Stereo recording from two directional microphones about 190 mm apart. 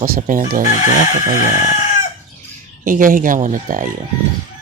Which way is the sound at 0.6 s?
20° right (ahead or behind).